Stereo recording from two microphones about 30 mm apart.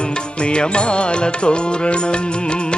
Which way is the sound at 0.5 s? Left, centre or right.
Left.